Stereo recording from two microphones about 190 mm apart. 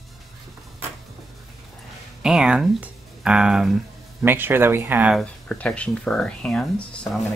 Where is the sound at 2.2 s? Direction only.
5° right (ahead or behind).